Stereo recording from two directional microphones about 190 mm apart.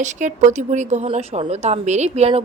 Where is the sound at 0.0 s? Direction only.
40° right (ahead or behind).